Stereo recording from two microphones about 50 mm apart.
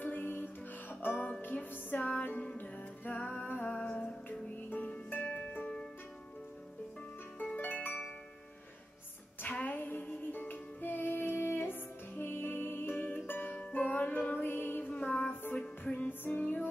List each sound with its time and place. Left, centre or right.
0.0 s music: left
3.7 s music: left
4.6 s music: left
7.3 s harp: left
9.4 s music: left
14.4 s music: left
14.9 s music: left